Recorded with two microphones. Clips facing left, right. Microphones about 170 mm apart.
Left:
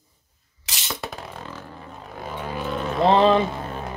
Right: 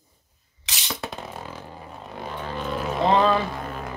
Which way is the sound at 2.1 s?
5° left (ahead or behind).